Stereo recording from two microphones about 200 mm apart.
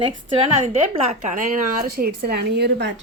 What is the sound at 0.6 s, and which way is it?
A woman's voice, 35° right (ahead or behind).